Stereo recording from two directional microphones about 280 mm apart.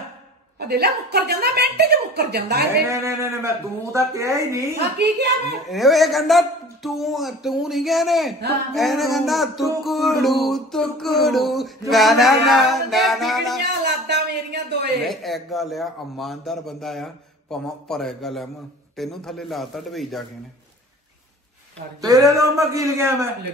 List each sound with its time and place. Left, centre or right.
0.6 s a woman's voice: right
2.9 s speech: centre
4.7 s a woman's voice: right
5.7 s a man's voice: centre
13.6 s a sound: right
15.0 s a man's voice: centre
22.0 s speech: centre